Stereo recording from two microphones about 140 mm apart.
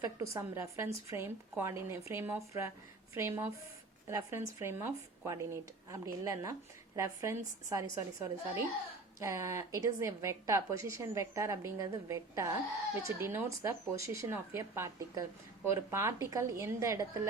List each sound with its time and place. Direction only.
0.2 s a woman's voice: 20° right (ahead or behind)